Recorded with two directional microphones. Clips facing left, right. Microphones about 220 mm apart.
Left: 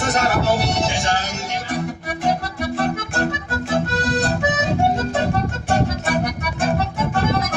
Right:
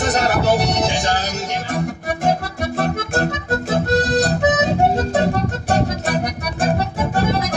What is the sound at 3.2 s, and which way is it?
Music, 40° right (ahead or behind).